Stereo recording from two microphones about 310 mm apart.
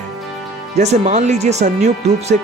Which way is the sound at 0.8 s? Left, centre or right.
Right.